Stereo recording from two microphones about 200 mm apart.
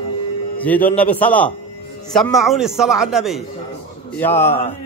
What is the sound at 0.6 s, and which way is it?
A man's voice, 10° left (ahead or behind).